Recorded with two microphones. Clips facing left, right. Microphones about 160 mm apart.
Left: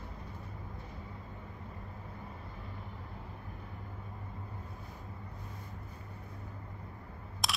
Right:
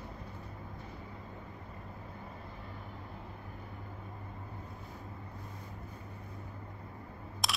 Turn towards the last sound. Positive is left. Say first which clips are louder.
# even
turn(degrees=0)  # may be behind; listen again after turning